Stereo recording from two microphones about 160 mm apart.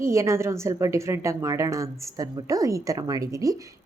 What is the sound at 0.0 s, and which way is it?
A woman's voice, 20° right (ahead or behind).